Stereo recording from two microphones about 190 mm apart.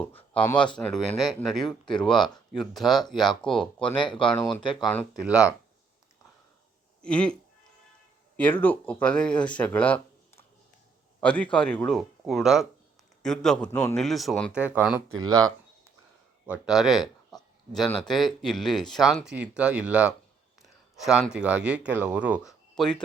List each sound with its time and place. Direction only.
0.1 s a sound: 30° left (ahead or behind)
0.4 s speech: 5° left (ahead or behind)
7.0 s speech: 5° left (ahead or behind)
8.4 s speech: 10° left (ahead or behind)
11.2 s a man's voice: 5° left (ahead or behind)
15.2 s speech: 20° right (ahead or behind)
16.5 s speech: centre (ahead or behind)
22.7 s speech: 5° left (ahead or behind)